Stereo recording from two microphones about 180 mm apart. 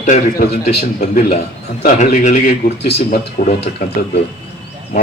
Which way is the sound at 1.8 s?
45° left (ahead or behind).